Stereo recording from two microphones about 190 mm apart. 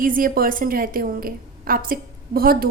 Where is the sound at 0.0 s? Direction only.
45° right (ahead or behind).